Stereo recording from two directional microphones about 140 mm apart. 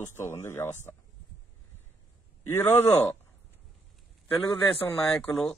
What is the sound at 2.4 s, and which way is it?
Speech, 15° left (ahead or behind).